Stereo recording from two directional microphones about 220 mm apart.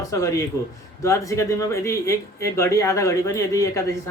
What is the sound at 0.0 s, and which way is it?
Speech, 15° left (ahead or behind).